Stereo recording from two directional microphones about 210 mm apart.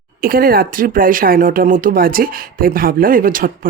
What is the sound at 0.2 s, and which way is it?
Speech, 45° right (ahead or behind).